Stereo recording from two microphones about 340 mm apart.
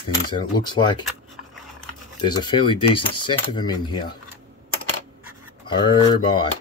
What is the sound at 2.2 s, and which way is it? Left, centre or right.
Speech, centre.